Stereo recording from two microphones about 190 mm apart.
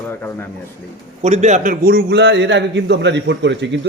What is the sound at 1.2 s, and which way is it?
Speech, 35° right (ahead or behind).